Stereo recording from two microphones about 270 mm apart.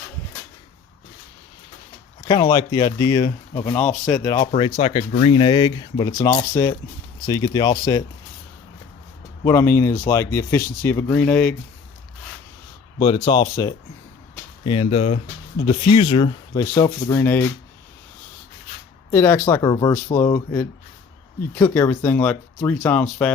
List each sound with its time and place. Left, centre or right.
2.2 s speech: centre
9.4 s speech: centre
13.2 s speech: centre
19.1 s speech: centre